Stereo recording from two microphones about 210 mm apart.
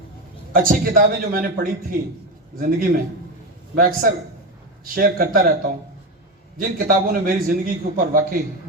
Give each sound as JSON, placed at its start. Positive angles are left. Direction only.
{"t": 0.5, "sound": "a man's voice", "side_deg": -40}
{"t": 6.6, "sound": "a man's voice", "side_deg": -45}